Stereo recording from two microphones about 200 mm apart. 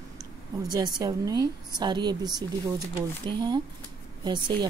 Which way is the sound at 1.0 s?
20° right (ahead or behind).